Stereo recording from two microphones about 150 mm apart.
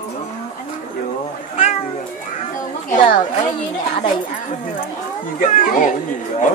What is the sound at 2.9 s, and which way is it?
Speech, 60° left (ahead or behind).